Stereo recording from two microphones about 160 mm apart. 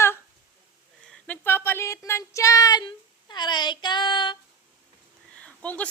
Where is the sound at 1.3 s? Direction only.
15° left (ahead or behind); by 4.4 s 30° left (ahead or behind).